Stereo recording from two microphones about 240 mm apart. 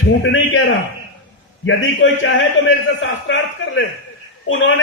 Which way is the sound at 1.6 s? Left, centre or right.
Left.